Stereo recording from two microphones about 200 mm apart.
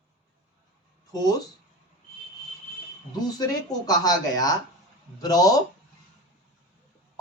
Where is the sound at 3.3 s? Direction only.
20° left (ahead or behind).